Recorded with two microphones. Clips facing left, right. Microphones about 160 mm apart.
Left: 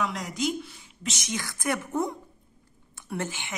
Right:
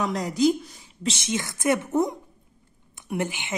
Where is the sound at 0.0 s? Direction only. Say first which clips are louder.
Right 7 dB; 35° right (ahead or behind).